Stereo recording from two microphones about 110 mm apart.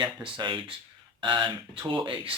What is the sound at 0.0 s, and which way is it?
Speech, 45° right (ahead or behind).